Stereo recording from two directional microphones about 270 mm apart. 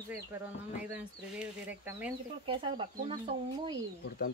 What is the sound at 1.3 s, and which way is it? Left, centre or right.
Speech, centre.